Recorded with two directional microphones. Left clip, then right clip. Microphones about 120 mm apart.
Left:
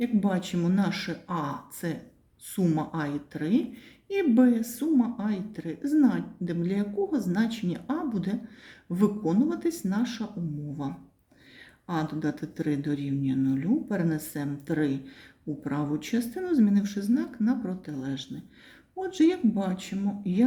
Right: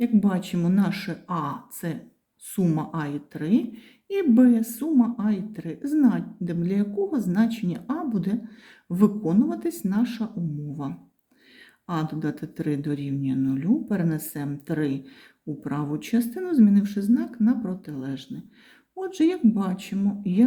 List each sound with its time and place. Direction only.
0.0 s speech: 30° right (ahead or behind)
11.9 s speech: 35° right (ahead or behind)